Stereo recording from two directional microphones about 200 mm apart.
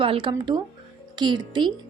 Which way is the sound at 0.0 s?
25° right (ahead or behind).